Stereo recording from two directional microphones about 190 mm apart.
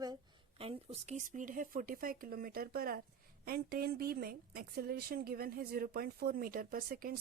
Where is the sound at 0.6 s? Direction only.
30° right (ahead or behind).